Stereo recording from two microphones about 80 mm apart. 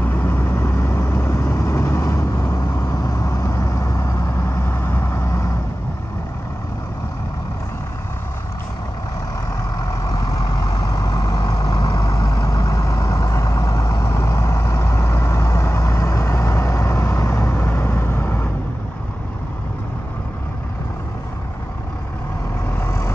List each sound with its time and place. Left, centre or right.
0.0 s vehicle: left
9.8 s vehicle: left
22.8 s vehicle: left